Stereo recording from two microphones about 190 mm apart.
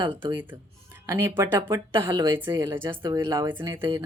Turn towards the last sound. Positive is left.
turn(degrees=-15)  # may be behind; listen again after turning